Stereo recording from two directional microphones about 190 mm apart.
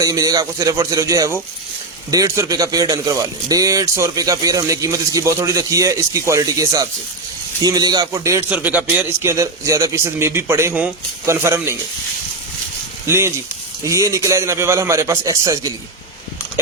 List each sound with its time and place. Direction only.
0.0 s a man's voice: 20° right (ahead or behind)
13.1 s a man's voice: 15° right (ahead or behind)